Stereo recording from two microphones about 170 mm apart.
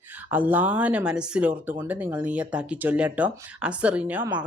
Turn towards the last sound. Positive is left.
turn(degrees=-10)  # may be behind; listen again after turning